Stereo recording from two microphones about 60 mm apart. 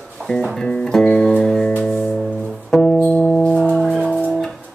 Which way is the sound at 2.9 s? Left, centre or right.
Centre.